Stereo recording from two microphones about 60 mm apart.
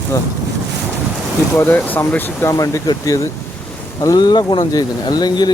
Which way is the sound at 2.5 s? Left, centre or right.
Left.